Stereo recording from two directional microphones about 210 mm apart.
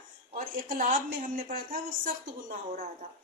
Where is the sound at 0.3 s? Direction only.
40° right (ahead or behind).